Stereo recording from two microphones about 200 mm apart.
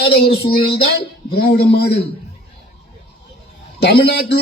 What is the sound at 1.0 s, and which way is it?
Speech, 55° left (ahead or behind).